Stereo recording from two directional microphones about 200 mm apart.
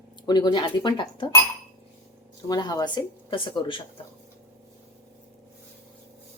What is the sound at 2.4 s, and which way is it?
Speech, 20° left (ahead or behind).